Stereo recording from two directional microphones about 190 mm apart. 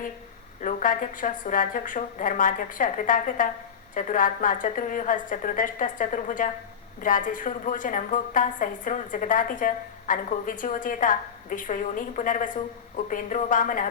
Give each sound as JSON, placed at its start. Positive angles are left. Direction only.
{"t": 0.6, "sound": "a woman's voice", "side_deg": 45}